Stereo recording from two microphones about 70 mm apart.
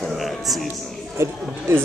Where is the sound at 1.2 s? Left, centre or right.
Right.